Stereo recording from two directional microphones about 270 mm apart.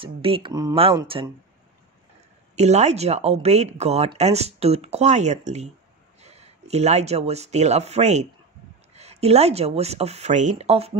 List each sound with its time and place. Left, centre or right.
0.0 s speech: centre
2.5 s speech: right